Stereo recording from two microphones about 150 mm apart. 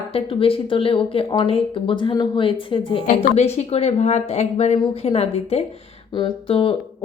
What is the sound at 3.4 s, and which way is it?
Speech, 45° left (ahead or behind).